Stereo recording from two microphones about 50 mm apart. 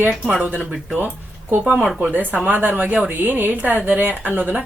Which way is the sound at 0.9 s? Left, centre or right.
Right.